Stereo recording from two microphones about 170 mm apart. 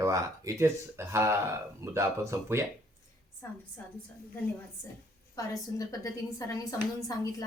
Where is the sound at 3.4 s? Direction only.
15° left (ahead or behind).